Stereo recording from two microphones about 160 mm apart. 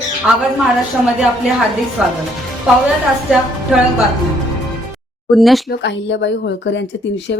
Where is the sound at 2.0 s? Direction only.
5° right (ahead or behind).